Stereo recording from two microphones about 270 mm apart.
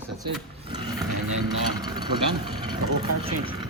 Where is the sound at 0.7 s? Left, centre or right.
Centre.